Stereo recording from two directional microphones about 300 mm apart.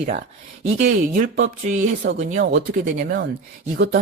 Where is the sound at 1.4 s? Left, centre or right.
Right.